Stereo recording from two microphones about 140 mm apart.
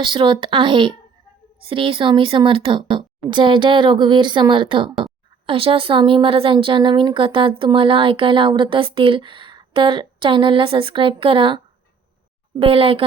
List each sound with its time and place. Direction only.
0.0 s speech: 35° right (ahead or behind)